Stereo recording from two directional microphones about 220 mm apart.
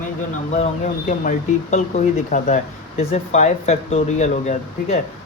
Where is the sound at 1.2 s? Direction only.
35° left (ahead or behind).